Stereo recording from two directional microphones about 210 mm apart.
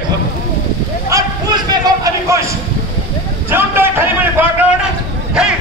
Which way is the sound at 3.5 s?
10° right (ahead or behind).